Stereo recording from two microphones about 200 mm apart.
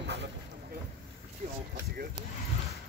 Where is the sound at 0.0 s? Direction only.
60° right (ahead or behind).